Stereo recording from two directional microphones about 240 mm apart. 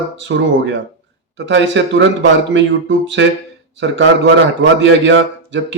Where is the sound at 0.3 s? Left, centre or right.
Right.